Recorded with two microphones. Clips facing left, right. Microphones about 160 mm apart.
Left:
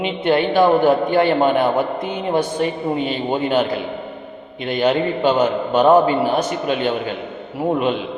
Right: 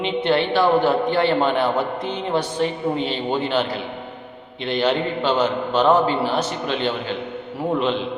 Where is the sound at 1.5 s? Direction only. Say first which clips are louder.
Left 3 dB; 10° left (ahead or behind).